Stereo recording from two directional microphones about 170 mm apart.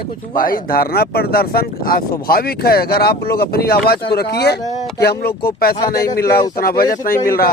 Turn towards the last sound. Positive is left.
turn(degrees=60)  # may be behind; listen again after turning